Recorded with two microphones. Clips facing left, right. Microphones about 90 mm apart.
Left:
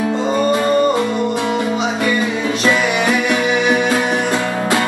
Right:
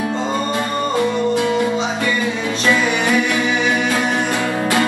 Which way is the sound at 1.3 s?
25° left (ahead or behind).